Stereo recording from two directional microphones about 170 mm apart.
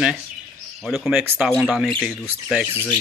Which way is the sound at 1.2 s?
15° right (ahead or behind).